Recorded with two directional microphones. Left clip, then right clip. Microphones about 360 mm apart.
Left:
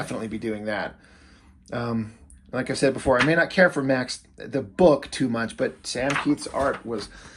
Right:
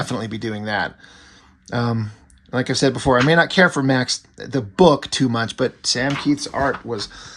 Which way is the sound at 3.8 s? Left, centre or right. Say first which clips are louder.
Right 4 dB; right.